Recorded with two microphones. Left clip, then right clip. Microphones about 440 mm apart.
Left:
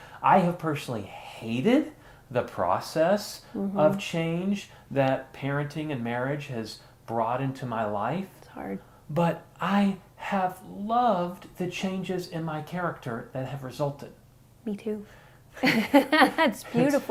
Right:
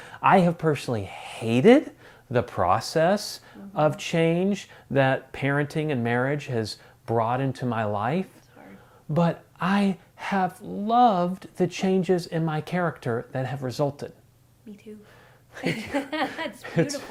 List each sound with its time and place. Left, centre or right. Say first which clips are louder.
0.2 s speech: right 2 dB; right
8.6 s speech: left 12 dB; left
9.1 s speech: right 1 dB; right
14.7 s speech: left 11 dB; left